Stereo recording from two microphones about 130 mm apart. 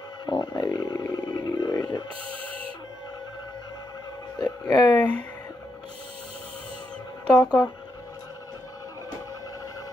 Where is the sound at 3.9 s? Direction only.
30° left (ahead or behind).